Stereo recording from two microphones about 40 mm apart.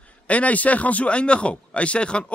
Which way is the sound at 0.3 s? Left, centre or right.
Left.